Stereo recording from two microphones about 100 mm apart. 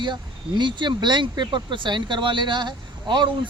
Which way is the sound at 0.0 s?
50° right (ahead or behind).